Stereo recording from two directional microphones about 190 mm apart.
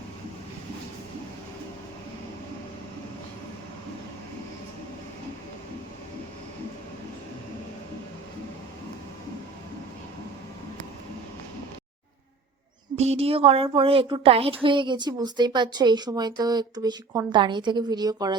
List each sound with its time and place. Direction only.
13.0 s a woman's voice: 35° right (ahead or behind)